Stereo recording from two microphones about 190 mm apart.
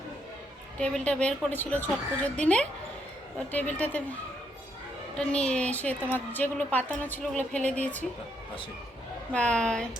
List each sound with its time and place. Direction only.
0.8 s a woman's voice: 5° left (ahead or behind)
9.3 s a woman's voice: 5° left (ahead or behind)